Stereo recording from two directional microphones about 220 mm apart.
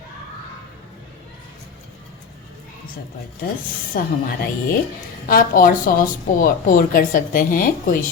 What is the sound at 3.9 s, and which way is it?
Speech, 40° left (ahead or behind).